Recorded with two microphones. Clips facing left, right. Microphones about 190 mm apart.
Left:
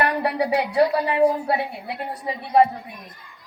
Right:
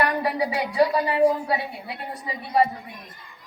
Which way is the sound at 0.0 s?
60° left (ahead or behind).